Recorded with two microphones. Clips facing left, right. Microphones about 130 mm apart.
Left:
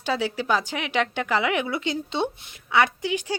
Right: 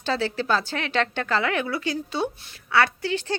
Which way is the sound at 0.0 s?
10° left (ahead or behind).